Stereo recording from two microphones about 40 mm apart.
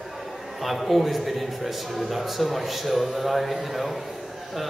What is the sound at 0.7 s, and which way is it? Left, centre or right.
A man's voice, centre.